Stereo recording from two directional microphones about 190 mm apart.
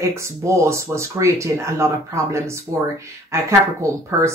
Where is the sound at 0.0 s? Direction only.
15° right (ahead or behind).